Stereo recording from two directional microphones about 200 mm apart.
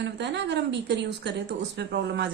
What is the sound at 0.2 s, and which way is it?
A woman's voice, 60° right (ahead or behind).